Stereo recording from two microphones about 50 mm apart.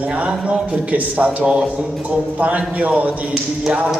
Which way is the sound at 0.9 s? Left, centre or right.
Right.